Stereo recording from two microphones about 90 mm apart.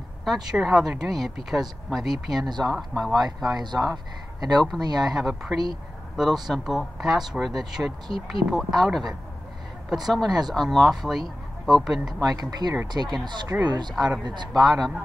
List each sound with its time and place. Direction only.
0.2 s speech: 5° right (ahead or behind)
2.4 s speech: 50° right (ahead or behind)
2.9 s speech: 5° left (ahead or behind)
3.4 s speech: 50° right (ahead or behind)
5.0 s speech: centre (ahead or behind)
12.2 s speech: 45° right (ahead or behind)